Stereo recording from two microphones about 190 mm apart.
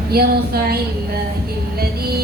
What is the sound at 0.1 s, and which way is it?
Speech, 55° right (ahead or behind).